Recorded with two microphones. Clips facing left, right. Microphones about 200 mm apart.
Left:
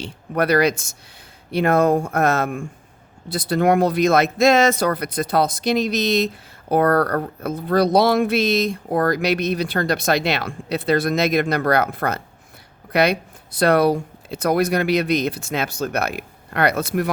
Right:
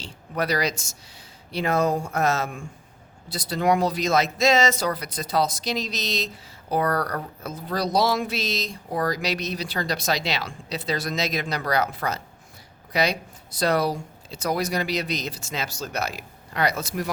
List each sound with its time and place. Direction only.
0.0 s speech: 55° left (ahead or behind)